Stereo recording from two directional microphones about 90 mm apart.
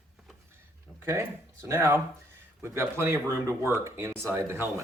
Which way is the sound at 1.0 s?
30° right (ahead or behind).